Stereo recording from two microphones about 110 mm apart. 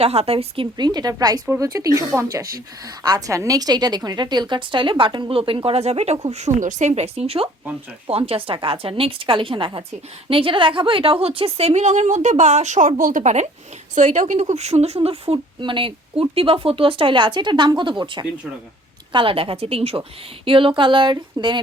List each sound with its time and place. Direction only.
0.0 s speech: 70° right (ahead or behind); by 21.6 s 45° right (ahead or behind)